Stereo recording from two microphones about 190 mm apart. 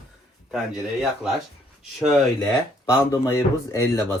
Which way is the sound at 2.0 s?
5° left (ahead or behind).